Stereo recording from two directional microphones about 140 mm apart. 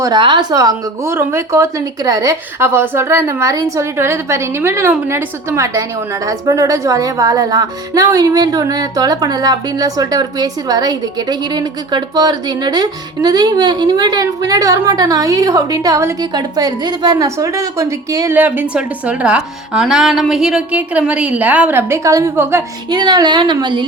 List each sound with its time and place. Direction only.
0.0 s a woman's voice: 30° right (ahead or behind)